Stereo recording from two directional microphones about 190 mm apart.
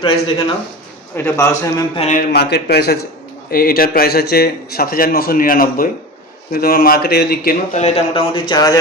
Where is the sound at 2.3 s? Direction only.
60° left (ahead or behind).